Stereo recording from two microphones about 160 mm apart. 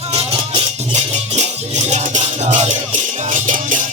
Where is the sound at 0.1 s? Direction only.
40° right (ahead or behind).